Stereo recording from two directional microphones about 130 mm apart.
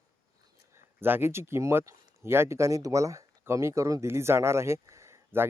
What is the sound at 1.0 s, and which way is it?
Speech, 15° right (ahead or behind).